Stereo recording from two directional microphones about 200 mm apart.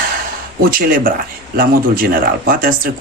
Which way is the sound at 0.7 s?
45° right (ahead or behind).